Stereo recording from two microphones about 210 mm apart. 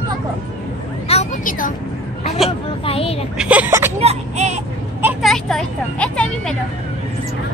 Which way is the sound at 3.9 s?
30° right (ahead or behind).